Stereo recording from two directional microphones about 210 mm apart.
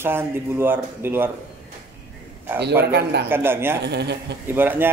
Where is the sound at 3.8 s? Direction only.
55° right (ahead or behind).